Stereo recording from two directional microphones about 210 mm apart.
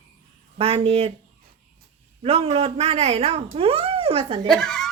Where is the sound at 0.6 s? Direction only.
30° right (ahead or behind).